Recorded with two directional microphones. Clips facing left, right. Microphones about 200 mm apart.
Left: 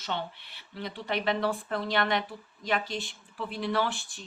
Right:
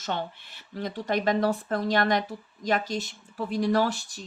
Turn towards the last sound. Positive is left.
turn(degrees=-40)  # may be behind; listen again after turning